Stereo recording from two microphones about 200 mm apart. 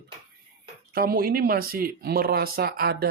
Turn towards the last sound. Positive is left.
turn(degrees=-50)  # may be behind; listen again after turning